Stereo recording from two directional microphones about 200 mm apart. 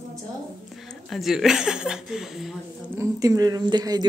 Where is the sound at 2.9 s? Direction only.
15° right (ahead or behind).